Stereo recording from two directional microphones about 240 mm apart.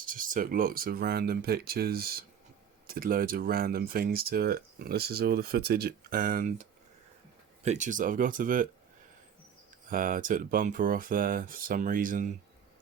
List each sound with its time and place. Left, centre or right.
0.0 s speech: right
9.9 s speech: right